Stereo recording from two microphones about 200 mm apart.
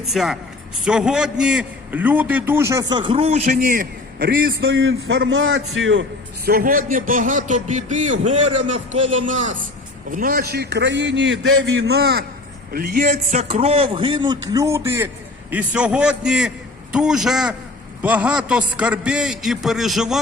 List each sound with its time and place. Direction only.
0.0 s a man's voice: centre (ahead or behind)
2.9 s a man's voice: 25° right (ahead or behind); by 6.1 s 70° right (ahead or behind)
6.4 s a man's voice: 45° right (ahead or behind)
13.3 s a man's voice: 35° right (ahead or behind); by 20.1 s centre (ahead or behind)